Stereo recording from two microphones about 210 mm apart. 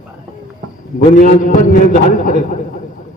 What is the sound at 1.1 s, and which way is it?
A man's voice, 40° left (ahead or behind).